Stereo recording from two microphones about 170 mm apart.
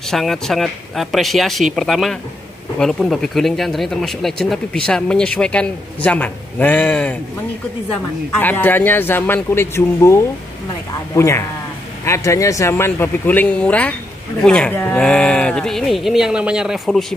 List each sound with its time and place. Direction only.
0.1 s speech: centre (ahead or behind)